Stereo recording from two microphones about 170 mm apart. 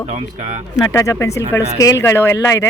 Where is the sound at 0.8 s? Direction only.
20° left (ahead or behind).